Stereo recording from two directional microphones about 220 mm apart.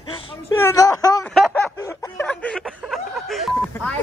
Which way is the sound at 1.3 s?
5° left (ahead or behind).